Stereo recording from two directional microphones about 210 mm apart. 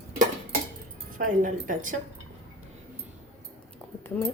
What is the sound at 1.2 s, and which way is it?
Speech, 40° right (ahead or behind).